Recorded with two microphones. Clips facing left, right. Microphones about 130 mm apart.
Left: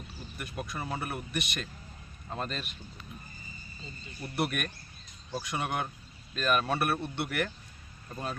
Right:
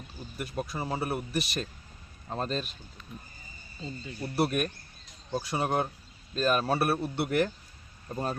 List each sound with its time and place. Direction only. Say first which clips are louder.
0.2 s speech: right 5 dB; 30° right (ahead or behind)
4.2 s speech: right 4 dB; 30° right (ahead or behind)